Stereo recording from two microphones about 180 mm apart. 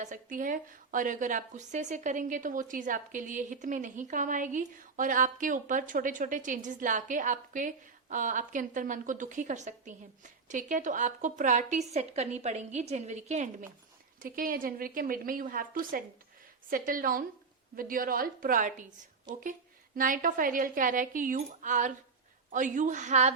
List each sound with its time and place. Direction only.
0.0 s a woman's voice: 45° right (ahead or behind)
14.2 s a woman's voice: 50° right (ahead or behind)